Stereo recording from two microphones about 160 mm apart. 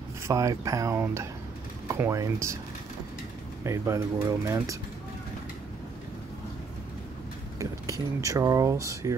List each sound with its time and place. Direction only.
0.3 s speech: 20° right (ahead or behind)
3.6 s speech: 20° right (ahead or behind)
8.2 s speech: 20° right (ahead or behind)